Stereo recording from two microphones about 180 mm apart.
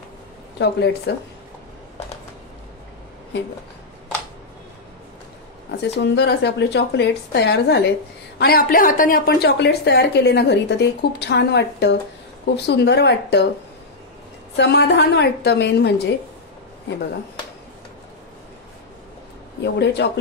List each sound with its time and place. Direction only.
0.6 s a woman's voice: 65° left (ahead or behind)
5.7 s a woman's voice: 65° left (ahead or behind)
14.6 s a woman's voice: 70° left (ahead or behind)
19.6 s a woman's voice: 70° left (ahead or behind)